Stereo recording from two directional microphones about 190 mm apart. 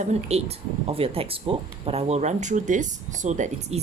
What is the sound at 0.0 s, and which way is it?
Speech, 35° right (ahead or behind).